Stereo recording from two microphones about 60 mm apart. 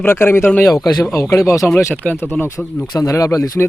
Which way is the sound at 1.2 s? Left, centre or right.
Left.